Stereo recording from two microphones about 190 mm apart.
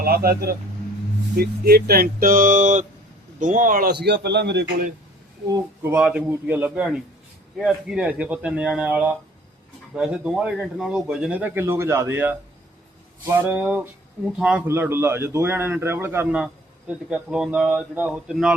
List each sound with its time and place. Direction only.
0.0 s a man's voice: 55° right (ahead or behind)
4.0 s a man's voice: 60° right (ahead or behind)
5.5 s speech: 20° right (ahead or behind)
5.9 s a man's voice: 5° right (ahead or behind)